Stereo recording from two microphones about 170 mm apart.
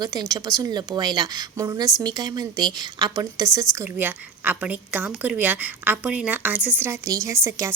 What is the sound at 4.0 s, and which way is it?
A woman's voice, 10° right (ahead or behind).